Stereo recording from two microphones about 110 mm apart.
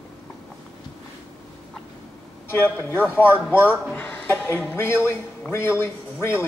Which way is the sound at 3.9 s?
15° left (ahead or behind).